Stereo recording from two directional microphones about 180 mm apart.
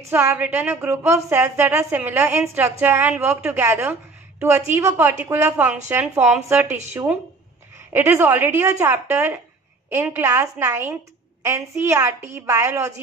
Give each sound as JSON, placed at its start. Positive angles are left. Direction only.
{"t": 0.0, "sound": "a woman's voice", "side_deg": -15}